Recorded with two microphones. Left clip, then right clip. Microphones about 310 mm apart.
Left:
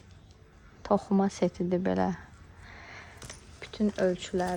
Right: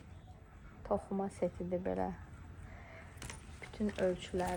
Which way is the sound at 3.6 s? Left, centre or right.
Left.